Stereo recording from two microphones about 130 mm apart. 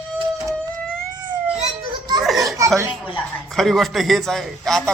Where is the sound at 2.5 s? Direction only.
25° right (ahead or behind).